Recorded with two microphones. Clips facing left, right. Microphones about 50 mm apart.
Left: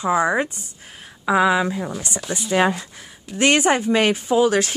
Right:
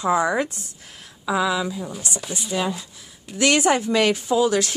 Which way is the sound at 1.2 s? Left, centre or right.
Left.